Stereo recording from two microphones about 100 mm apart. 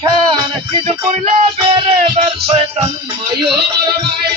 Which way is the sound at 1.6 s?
55° right (ahead or behind).